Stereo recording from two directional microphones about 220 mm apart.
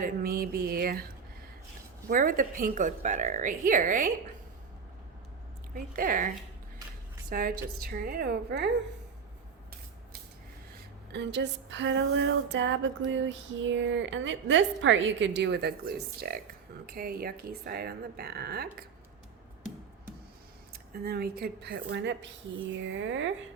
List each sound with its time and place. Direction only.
0.0 s a woman's voice: 40° right (ahead or behind)
5.7 s a woman's voice: 40° right (ahead or behind)
11.1 s a sound: 50° right (ahead or behind)
16.8 s speech: 40° right (ahead or behind)
20.7 s speech: 45° right (ahead or behind)
22.8 s a sound: 60° right (ahead or behind)